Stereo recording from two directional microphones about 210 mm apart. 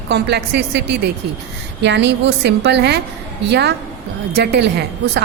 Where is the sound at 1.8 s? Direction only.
55° right (ahead or behind).